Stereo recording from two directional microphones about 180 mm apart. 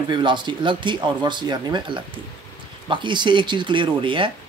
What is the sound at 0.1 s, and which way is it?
Speech, 25° right (ahead or behind).